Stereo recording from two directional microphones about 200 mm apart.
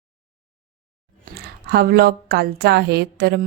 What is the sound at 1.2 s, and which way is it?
A woman's voice, 50° right (ahead or behind).